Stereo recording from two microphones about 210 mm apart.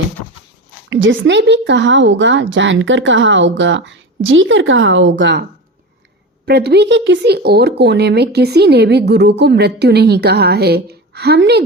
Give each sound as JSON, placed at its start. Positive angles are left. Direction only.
{"t": 0.9, "sound": "speech", "side_deg": -65}